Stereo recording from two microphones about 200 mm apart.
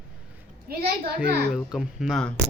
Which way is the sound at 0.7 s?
50° right (ahead or behind).